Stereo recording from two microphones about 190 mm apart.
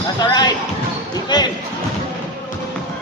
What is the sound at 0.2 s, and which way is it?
Speech, 20° left (ahead or behind).